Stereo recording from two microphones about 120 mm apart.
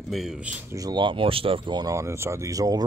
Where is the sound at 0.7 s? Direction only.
30° right (ahead or behind).